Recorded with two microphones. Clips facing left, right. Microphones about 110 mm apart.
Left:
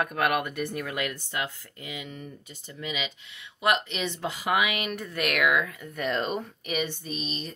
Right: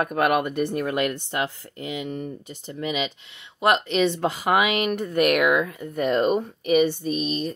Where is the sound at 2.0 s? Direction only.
35° right (ahead or behind).